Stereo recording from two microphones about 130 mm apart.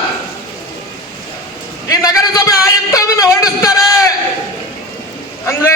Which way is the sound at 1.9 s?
25° left (ahead or behind).